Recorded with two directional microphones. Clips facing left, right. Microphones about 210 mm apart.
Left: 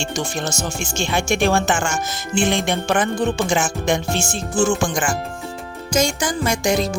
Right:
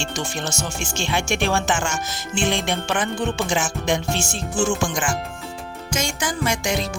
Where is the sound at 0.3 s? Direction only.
45° left (ahead or behind).